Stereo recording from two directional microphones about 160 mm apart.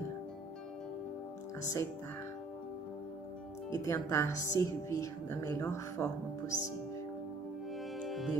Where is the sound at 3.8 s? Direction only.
20° left (ahead or behind).